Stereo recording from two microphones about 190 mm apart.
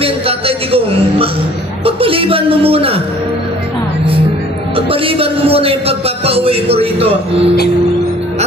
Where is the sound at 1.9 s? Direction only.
30° right (ahead or behind).